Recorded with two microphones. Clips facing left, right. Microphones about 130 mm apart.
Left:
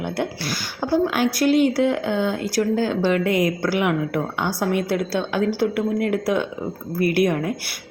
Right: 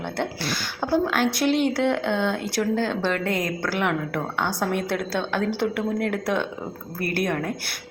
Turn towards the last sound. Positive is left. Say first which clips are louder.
# left 6 dB
turn(degrees=10)  # may be behind; listen again after turning